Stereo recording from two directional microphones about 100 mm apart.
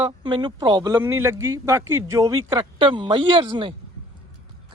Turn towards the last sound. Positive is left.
turn(degrees=-55)  # may be behind; listen again after turning